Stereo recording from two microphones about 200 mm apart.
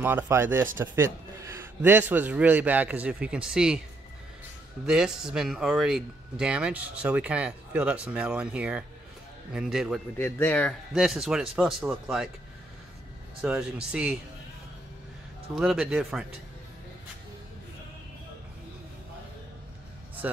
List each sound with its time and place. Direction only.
0.0 s a man's voice: 10° right (ahead or behind)
4.8 s speech: 5° right (ahead or behind)
10.1 s speech: 10° left (ahead or behind)
11.0 s speech: centre (ahead or behind)
13.4 s speech: 5° right (ahead or behind)
15.5 s speech: centre (ahead or behind)